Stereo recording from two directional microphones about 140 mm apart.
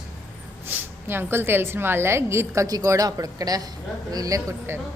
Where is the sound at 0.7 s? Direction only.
15° right (ahead or behind).